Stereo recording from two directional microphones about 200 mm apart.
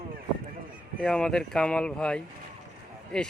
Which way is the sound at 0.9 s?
5° left (ahead or behind).